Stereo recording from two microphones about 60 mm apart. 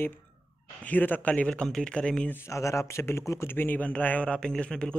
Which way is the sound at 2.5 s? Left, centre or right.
Left.